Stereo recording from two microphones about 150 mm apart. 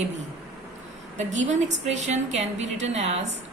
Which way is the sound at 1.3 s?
50° right (ahead or behind).